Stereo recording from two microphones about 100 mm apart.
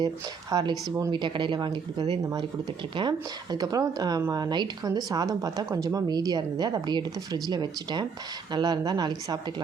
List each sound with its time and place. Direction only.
0.5 s speech: 40° right (ahead or behind)
1.1 s speech: 50° right (ahead or behind)